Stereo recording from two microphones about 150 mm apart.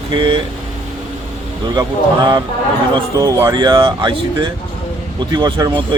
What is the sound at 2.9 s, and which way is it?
Speech, 25° right (ahead or behind).